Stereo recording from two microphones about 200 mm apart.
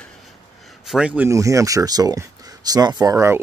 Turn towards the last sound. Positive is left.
turn(degrees=-15)  # may be behind; listen again after turning